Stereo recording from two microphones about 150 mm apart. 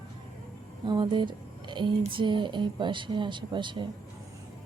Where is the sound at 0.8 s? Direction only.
30° right (ahead or behind).